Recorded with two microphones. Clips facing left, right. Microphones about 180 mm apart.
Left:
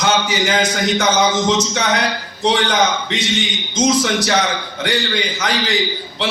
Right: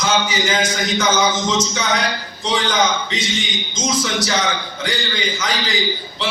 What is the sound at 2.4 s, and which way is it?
A man's voice, 65° left (ahead or behind).